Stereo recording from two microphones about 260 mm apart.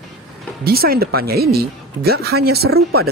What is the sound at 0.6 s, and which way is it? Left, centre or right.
Speech, right.